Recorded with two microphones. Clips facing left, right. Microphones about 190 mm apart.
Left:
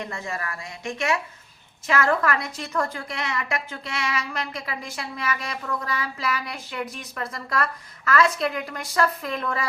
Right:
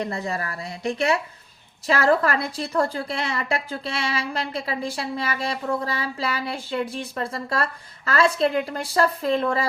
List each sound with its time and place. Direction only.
0.0 s a woman's voice: 35° right (ahead or behind)